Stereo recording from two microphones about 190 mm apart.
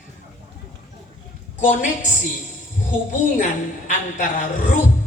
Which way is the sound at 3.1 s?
40° left (ahead or behind).